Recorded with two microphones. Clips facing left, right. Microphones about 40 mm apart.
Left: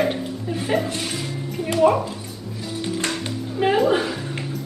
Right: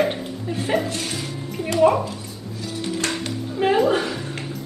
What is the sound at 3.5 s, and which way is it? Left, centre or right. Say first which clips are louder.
Music: even; centre.